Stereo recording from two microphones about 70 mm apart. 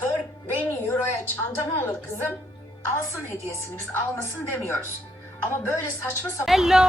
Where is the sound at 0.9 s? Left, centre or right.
Left.